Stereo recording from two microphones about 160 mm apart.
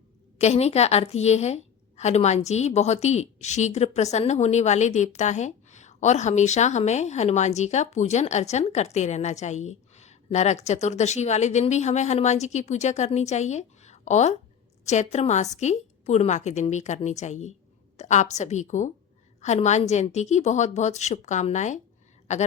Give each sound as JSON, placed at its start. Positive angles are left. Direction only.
{"t": 0.3, "sound": "a woman's voice", "side_deg": 45}